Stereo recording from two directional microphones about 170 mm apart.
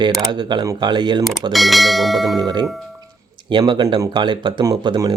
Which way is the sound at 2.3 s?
25° right (ahead or behind).